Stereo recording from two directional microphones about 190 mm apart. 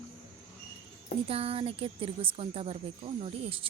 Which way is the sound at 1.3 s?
30° right (ahead or behind).